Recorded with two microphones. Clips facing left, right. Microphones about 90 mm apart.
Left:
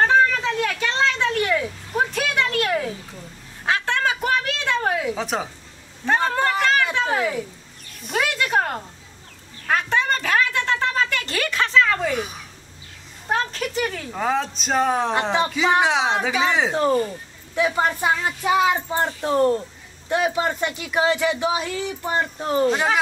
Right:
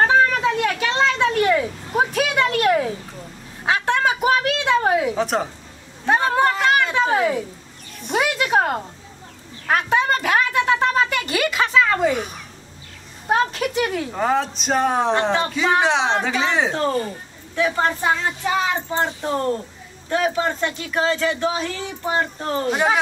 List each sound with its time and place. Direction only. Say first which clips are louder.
0.0 s a sound: right 1 dB; 10° right (ahead or behind)
5.2 s a woman's voice: right 4 dB; centre (ahead or behind)
6.0 s vehicle: right 3 dB; 10° right (ahead or behind)
6.6 s a sound: right 2 dB; 15° right (ahead or behind)
7.0 s a child's voice: right 4 dB; 10° right (ahead or behind)
8.0 s a sound: right 2 dB; centre (ahead or behind)
12.1 s a woman's voice: right 2 dB; centre (ahead or behind)
16.7 s speech: left 2 dB; 15° left (ahead or behind)
22.0 s a woman's voice: right 3 dB; 5° right (ahead or behind)
22.4 s speech: left 3 dB; 10° left (ahead or behind)
22.7 s speech: right 1 dB; 5° right (ahead or behind)